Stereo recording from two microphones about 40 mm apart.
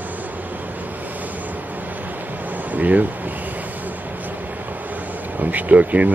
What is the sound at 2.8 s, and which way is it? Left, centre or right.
Speech, right.